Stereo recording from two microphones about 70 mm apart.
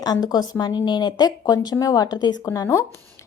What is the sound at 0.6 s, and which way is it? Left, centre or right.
Speech, left.